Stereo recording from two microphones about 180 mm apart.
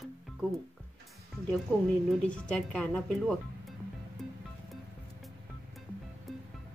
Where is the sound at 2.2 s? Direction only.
5° left (ahead or behind).